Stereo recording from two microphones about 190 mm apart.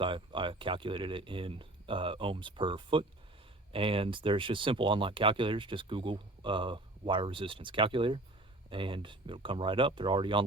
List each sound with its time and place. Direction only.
0.0 s speech: 25° right (ahead or behind)